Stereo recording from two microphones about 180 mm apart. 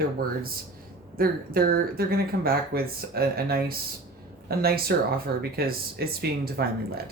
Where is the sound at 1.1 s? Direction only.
55° right (ahead or behind).